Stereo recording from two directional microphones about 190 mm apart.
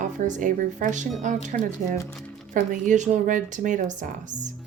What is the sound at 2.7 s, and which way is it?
Speech, 40° right (ahead or behind).